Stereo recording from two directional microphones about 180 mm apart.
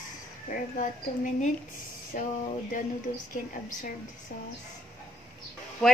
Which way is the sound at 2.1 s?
45° left (ahead or behind).